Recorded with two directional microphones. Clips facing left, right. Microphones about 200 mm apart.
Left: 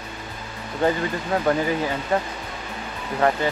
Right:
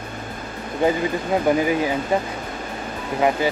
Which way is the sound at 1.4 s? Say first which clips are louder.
Right 3 dB; 15° right (ahead or behind).